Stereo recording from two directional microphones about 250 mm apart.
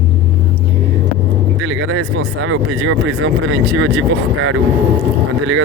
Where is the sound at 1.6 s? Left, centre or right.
Right.